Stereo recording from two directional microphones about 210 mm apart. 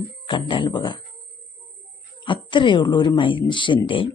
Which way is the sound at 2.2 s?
25° left (ahead or behind).